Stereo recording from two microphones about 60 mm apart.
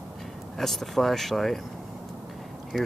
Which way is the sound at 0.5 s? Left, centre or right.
Centre.